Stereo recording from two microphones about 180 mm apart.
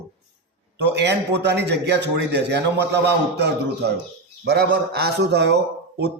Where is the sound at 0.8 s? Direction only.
70° right (ahead or behind).